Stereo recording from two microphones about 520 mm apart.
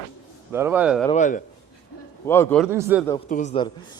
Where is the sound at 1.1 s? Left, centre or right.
Centre.